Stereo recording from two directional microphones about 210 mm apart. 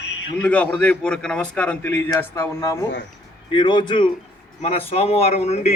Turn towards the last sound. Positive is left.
turn(degrees=30)  # may be behind; listen again after turning